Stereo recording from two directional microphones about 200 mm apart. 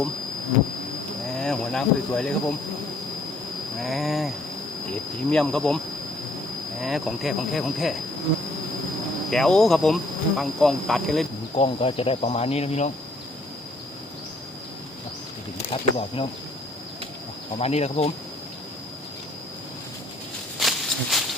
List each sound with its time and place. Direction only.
1.4 s speech: 5° left (ahead or behind)
3.8 s speech: centre (ahead or behind)
5.3 s speech: 5° left (ahead or behind)
6.8 s speech: centre (ahead or behind)
9.3 s speech: centre (ahead or behind)
11.5 s insect: 30° left (ahead or behind)
15.7 s speech: 25° left (ahead or behind)
17.6 s insect: 30° left (ahead or behind)
20.6 s a sound: centre (ahead or behind)